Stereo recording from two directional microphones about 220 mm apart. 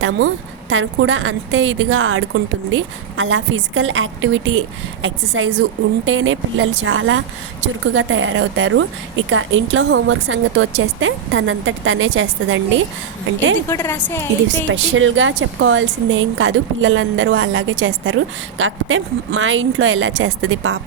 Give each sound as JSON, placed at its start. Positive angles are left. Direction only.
{"t": 0.7, "sound": "speech", "side_deg": -60}
{"t": 13.7, "sound": "a woman's voice", "side_deg": 10}
{"t": 14.7, "sound": "speech", "side_deg": -60}